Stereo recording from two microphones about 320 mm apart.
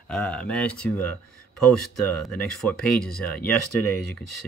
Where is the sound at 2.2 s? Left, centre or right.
Centre.